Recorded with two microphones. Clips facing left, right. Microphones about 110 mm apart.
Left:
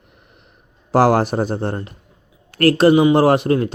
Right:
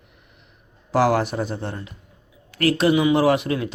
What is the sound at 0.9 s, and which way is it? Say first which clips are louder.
A man's voice: left 5 dB; 45° left (ahead or behind).